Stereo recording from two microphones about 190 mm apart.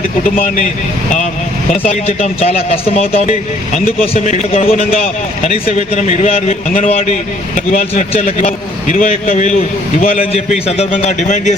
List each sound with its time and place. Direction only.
0.3 s a man's voice: 40° left (ahead or behind)
1.9 s a man's voice: 35° left (ahead or behind)
10.7 s a man's voice: 35° left (ahead or behind)